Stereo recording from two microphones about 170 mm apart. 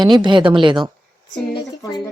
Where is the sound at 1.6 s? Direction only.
20° left (ahead or behind).